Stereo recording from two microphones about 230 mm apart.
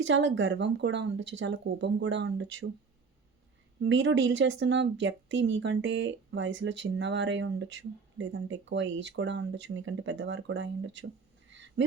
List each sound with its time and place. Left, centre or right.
0.0 s speech: right
3.8 s speech: right